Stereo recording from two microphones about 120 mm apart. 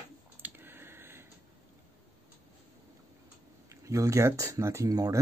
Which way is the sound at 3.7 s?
25° right (ahead or behind).